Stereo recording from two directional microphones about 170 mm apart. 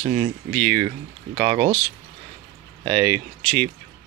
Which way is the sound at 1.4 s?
35° right (ahead or behind).